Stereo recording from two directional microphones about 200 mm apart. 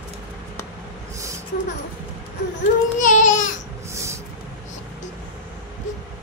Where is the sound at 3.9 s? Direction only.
15° right (ahead or behind).